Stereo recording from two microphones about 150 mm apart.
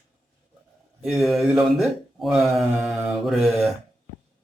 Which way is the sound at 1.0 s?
Centre (ahead or behind).